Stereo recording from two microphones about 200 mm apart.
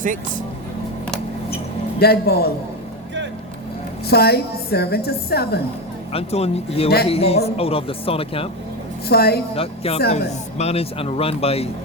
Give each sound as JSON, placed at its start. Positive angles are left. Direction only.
{"t": 2.0, "sound": "a woman's voice", "side_deg": 50}
{"t": 4.0, "sound": "a woman's voice", "side_deg": 50}
{"t": 6.1, "sound": "a woman's voice", "side_deg": 30}
{"t": 9.0, "sound": "a woman's voice", "side_deg": 50}
{"t": 9.6, "sound": "a woman's voice", "side_deg": 30}